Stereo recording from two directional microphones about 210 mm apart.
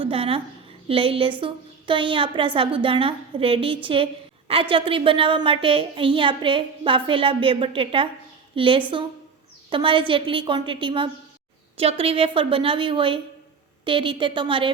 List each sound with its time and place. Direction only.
0.0 s a woman's voice: 25° right (ahead or behind)